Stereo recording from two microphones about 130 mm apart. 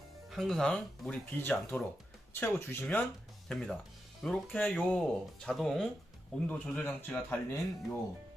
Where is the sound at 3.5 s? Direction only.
5° left (ahead or behind).